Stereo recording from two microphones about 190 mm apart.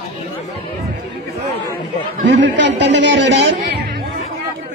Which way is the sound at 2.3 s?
65° right (ahead or behind).